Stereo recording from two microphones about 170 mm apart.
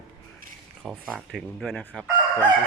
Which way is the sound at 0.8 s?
Centre (ahead or behind).